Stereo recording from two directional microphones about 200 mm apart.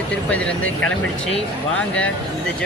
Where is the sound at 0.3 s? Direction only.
5° left (ahead or behind).